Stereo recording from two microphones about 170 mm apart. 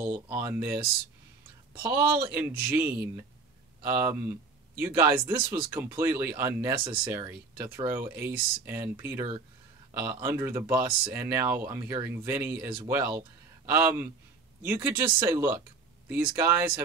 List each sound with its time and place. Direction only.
0.0 s speech: 10° right (ahead or behind)
2.2 s speech: 15° right (ahead or behind)
6.7 s speech: 30° right (ahead or behind)
7.1 s speech: 10° right (ahead or behind)